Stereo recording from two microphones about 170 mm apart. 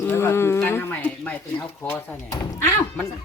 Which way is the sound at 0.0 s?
15° left (ahead or behind).